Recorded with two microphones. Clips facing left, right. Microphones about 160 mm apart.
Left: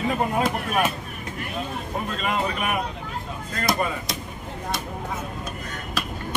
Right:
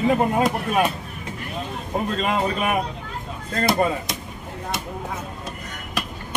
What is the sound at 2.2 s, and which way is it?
Speech, 30° right (ahead or behind).